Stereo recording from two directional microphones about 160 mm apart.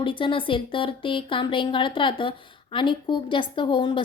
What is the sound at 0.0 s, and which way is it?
Speech, 30° left (ahead or behind).